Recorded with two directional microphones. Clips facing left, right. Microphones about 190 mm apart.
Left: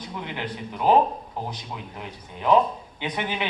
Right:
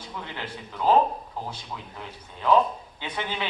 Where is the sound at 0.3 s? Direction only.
15° left (ahead or behind).